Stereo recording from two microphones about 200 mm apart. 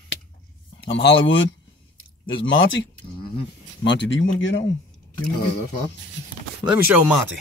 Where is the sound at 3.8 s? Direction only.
65° left (ahead or behind).